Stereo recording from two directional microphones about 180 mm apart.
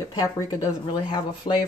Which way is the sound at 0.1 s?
20° left (ahead or behind).